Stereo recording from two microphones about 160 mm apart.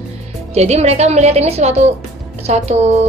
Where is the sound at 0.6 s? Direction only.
45° right (ahead or behind).